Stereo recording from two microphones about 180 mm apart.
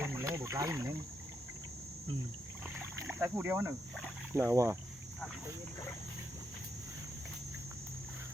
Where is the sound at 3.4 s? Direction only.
15° right (ahead or behind).